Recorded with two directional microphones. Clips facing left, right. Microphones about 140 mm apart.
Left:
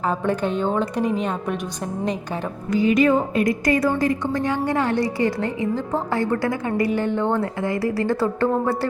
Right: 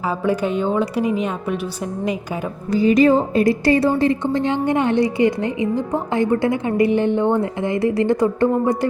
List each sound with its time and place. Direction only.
0.3 s a woman's voice: 10° right (ahead or behind)
2.7 s a woman's voice: 35° right (ahead or behind); by 8.9 s 15° right (ahead or behind)